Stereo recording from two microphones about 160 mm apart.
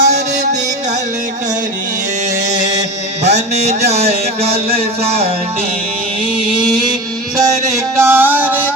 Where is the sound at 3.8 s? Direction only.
40° right (ahead or behind).